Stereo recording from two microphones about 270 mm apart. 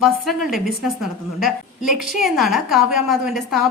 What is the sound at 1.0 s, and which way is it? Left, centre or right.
A woman's voice, centre.